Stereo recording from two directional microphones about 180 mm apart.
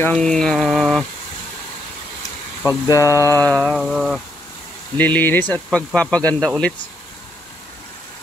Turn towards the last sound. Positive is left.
turn(degrees=0)  # may be behind; listen again after turning